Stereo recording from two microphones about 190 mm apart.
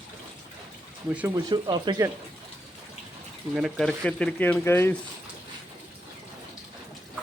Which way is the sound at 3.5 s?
Centre (ahead or behind).